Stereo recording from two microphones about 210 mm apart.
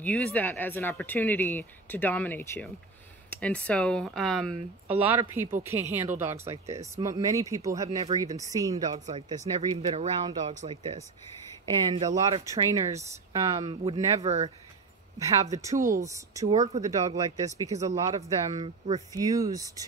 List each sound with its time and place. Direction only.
0.0 s speech: 5° left (ahead or behind); by 9.0 s 15° right (ahead or behind)
9.0 s speech: 30° right (ahead or behind)
14.2 s speech: 30° right (ahead or behind)
15.1 s speech: 15° right (ahead or behind)
16.4 s speech: 30° right (ahead or behind)
16.8 s speech: 15° right (ahead or behind)
18.5 s speech: 30° right (ahead or behind)
19.1 s speech: 15° right (ahead or behind)